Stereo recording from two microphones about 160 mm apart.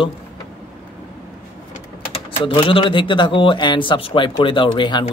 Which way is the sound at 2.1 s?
30° left (ahead or behind).